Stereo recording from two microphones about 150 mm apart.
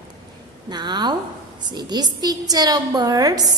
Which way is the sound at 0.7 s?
30° right (ahead or behind).